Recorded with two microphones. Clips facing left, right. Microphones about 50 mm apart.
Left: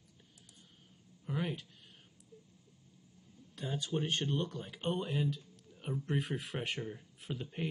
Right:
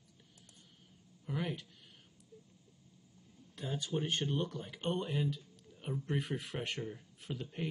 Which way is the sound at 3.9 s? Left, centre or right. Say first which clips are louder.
Even; centre.